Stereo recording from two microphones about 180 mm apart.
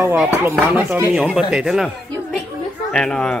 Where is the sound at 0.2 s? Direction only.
10° right (ahead or behind).